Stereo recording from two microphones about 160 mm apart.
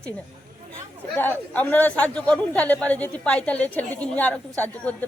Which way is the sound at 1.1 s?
10° left (ahead or behind).